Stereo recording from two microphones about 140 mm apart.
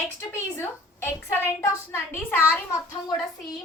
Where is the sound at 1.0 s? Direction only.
15° left (ahead or behind).